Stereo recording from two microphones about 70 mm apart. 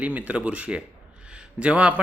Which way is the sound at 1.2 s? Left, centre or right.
Centre.